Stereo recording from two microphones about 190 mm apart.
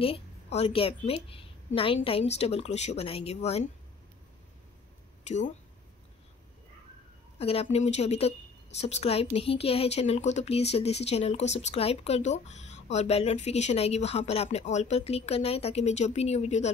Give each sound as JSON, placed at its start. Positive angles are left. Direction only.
{"t": 0.0, "sound": "a woman's voice", "side_deg": 30}
{"t": 5.2, "sound": "speech", "side_deg": 40}
{"t": 7.3, "sound": "a woman's voice", "side_deg": 30}